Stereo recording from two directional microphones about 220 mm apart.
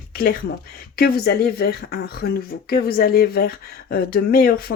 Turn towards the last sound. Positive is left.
turn(degrees=45)  # may be behind; listen again after turning